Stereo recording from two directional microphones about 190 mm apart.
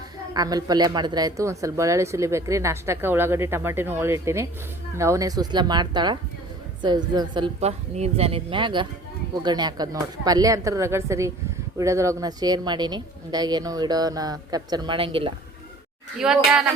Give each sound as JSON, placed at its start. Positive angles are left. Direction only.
{"t": 0.3, "sound": "a woman's voice", "side_deg": -20}
{"t": 16.2, "sound": "speech", "side_deg": -5}